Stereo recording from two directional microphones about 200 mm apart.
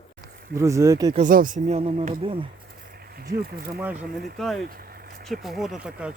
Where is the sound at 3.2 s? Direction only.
50° right (ahead or behind).